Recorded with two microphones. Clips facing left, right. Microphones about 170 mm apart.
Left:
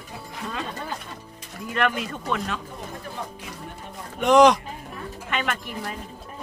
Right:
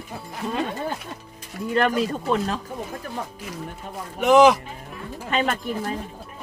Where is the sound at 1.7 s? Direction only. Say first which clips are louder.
Right 4 dB; 35° right (ahead or behind).